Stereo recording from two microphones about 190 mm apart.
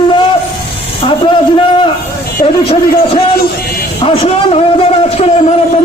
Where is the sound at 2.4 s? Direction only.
30° left (ahead or behind).